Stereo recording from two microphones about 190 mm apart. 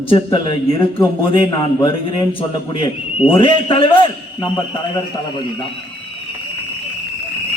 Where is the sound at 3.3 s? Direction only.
30° left (ahead or behind).